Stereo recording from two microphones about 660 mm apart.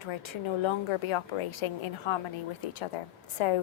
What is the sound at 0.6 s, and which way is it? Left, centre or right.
A woman's voice, left.